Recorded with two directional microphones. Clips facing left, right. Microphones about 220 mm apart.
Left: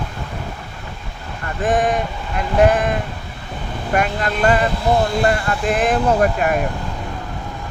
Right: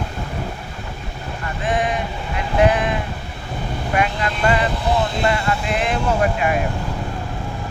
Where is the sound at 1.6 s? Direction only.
45° left (ahead or behind).